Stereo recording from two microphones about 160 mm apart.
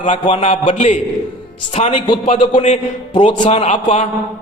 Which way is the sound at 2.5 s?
45° left (ahead or behind).